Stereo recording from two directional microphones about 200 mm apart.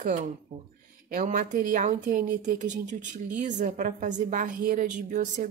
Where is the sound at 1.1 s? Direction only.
40° right (ahead or behind).